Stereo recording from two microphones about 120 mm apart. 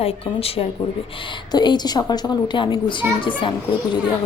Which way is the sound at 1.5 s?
35° left (ahead or behind).